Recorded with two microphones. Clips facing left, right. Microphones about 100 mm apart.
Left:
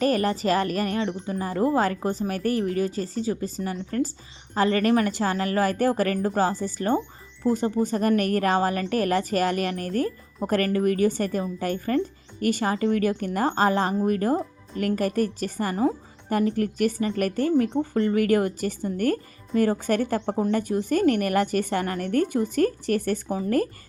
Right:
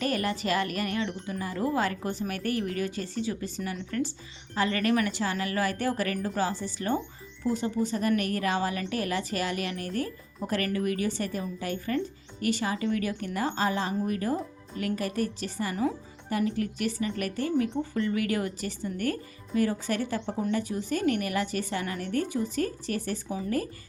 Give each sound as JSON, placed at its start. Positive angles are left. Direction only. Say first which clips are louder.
{"t": 0.0, "sound": "a woman's voice", "louder": "left 6 dB", "side_deg": 40}